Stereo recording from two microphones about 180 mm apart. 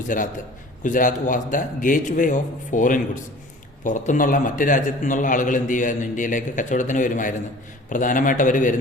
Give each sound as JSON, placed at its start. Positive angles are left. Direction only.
{"t": 0.1, "sound": "a man's voice", "side_deg": 45}